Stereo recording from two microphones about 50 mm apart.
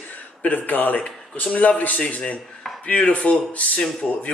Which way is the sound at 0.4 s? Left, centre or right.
Left.